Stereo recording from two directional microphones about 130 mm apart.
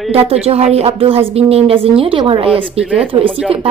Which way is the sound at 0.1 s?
50° right (ahead or behind).